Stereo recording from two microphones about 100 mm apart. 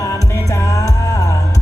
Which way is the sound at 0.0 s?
35° left (ahead or behind).